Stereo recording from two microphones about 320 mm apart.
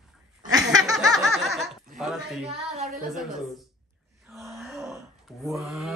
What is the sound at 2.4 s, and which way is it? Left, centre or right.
Speech, right.